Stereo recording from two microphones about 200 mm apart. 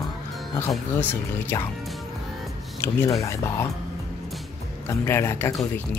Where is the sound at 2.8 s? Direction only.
15° left (ahead or behind).